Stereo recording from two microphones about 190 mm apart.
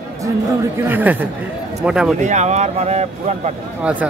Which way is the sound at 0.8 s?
10° right (ahead or behind).